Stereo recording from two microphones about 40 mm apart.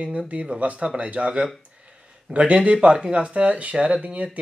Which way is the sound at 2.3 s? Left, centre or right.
Right.